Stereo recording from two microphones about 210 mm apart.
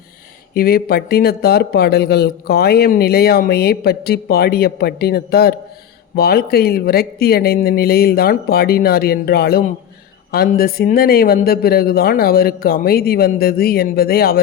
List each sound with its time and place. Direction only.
0.5 s speech: 45° left (ahead or behind)